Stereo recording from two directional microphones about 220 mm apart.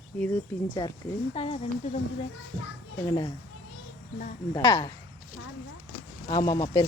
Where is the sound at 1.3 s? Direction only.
25° left (ahead or behind).